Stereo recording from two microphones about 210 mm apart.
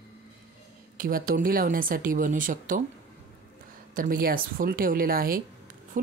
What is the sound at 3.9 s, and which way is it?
Speech, 40° right (ahead or behind).